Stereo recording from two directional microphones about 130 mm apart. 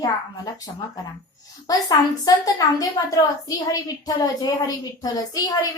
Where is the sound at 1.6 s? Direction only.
30° left (ahead or behind).